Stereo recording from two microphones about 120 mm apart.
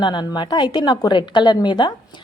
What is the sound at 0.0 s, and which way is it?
Speech, 40° left (ahead or behind).